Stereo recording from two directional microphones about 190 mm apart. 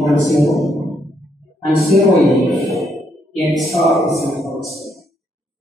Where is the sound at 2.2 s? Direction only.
Centre (ahead or behind).